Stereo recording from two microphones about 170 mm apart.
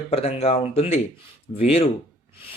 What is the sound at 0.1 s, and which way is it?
Speech, 35° left (ahead or behind).